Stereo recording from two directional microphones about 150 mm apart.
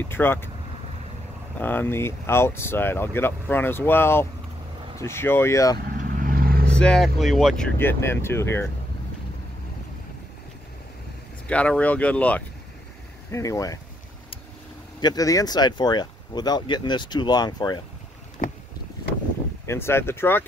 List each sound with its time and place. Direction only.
0.0 s speech: 15° left (ahead or behind)
1.6 s speech: 10° left (ahead or behind)
5.9 s vehicle: 70° right (ahead or behind); by 6.7 s 85° right
6.8 s speech: 5° left (ahead or behind)
7.8 s speech: 15° left (ahead or behind)
11.4 s speech: 10° left (ahead or behind)
13.3 s speech: 20° left (ahead or behind)
15.0 s speech: 25° left (ahead or behind)
19.6 s speech: 15° left (ahead or behind)